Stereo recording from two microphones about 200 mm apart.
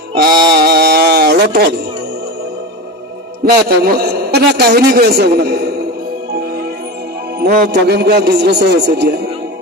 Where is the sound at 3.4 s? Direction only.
50° right (ahead or behind).